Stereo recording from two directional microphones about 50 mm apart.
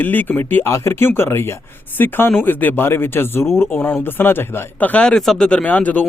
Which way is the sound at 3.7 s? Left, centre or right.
Left.